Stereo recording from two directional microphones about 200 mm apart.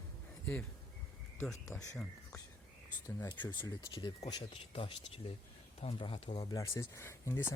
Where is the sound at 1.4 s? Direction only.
5° left (ahead or behind).